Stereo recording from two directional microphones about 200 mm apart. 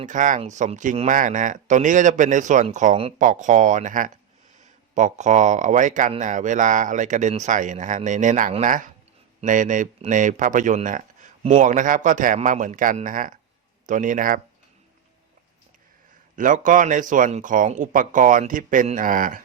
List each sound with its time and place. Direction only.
0.0 s speech: 40° right (ahead or behind)
16.3 s speech: 40° right (ahead or behind)